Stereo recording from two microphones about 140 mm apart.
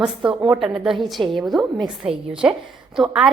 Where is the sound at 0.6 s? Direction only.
Centre (ahead or behind).